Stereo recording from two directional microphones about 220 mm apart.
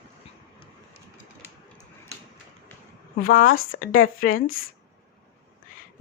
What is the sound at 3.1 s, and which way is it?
Speech, 40° left (ahead or behind).